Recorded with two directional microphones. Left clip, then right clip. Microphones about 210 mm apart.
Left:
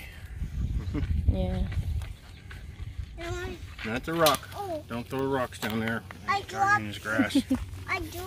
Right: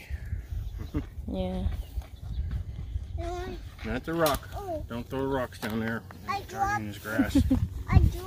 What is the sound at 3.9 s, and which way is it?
Speech, 20° left (ahead or behind).